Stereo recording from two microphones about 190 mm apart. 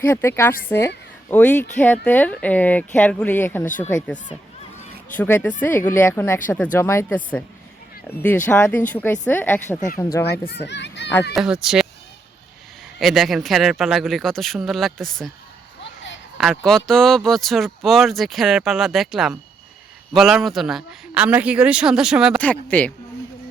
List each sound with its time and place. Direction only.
0.0 s speech: 10° left (ahead or behind)
10.5 s a child's voice: 65° left (ahead or behind)
11.3 s speech: 5° right (ahead or behind)
13.0 s speech: centre (ahead or behind)
15.8 s a sound: 70° left (ahead or behind)
16.4 s speech: centre (ahead or behind)
22.4 s speech: 10° left (ahead or behind)